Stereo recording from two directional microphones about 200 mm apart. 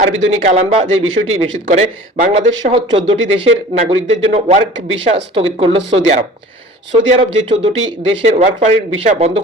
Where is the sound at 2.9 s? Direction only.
25° right (ahead or behind).